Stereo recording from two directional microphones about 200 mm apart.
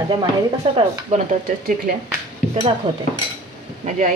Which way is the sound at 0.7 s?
25° right (ahead or behind).